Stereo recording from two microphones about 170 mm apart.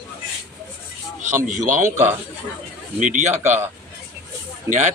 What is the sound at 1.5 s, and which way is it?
Speech, 45° right (ahead or behind).